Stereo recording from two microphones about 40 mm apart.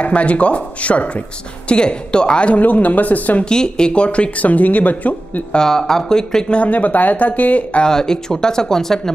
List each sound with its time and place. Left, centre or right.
0.0 s speech: left
1.7 s speech: left
2.5 s speech: left
3.4 s speech: centre; by 5.4 s left
5.6 s speech: centre
6.5 s speech: left
7.8 s speech: centre